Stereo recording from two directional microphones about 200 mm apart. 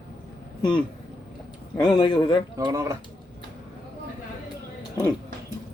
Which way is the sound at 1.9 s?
25° left (ahead or behind).